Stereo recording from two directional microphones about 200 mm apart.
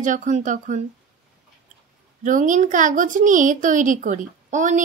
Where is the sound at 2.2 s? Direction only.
40° right (ahead or behind).